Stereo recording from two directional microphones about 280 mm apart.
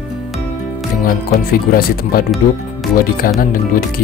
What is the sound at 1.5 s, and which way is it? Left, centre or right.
Speech, left.